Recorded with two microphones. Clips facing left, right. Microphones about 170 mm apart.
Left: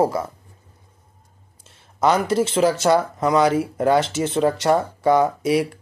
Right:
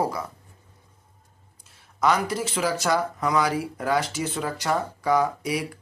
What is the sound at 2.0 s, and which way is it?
Speech, 25° left (ahead or behind).